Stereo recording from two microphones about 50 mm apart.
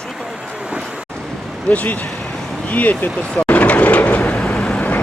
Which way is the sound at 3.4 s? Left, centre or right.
Left.